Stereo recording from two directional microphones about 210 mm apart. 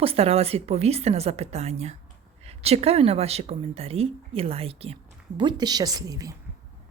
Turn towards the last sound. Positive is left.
turn(degrees=-15)  # may be behind; listen again after turning